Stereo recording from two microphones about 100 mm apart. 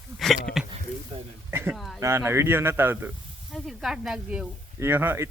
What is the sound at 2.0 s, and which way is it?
Speech, 25° right (ahead or behind).